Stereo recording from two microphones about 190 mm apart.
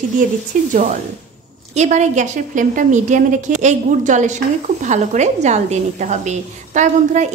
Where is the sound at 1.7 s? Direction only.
40° right (ahead or behind).